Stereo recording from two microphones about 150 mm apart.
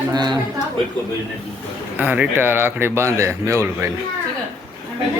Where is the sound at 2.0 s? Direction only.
10° right (ahead or behind).